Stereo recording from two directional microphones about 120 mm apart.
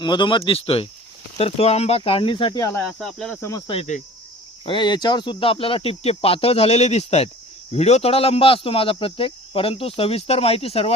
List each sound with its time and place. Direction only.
0.0 s speech: 40° left (ahead or behind)
2.8 s speech: 5° left (ahead or behind)
4.6 s speech: 40° left (ahead or behind)